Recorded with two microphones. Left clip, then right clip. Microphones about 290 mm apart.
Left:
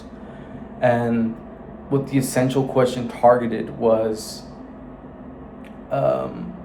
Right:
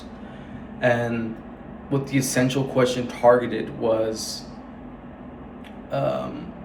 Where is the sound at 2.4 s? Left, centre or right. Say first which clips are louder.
Left 3 dB; centre.